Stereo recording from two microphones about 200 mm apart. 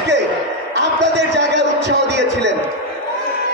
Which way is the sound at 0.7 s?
60° right (ahead or behind).